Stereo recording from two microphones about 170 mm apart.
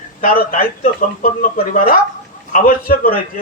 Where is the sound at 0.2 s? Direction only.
55° left (ahead or behind).